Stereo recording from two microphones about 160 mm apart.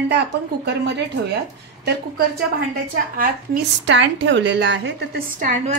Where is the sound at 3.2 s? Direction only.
65° right (ahead or behind).